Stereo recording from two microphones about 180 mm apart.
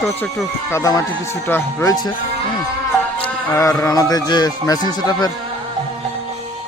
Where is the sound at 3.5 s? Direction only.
15° left (ahead or behind).